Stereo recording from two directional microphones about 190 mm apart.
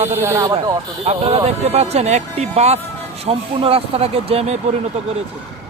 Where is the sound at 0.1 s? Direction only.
10° right (ahead or behind).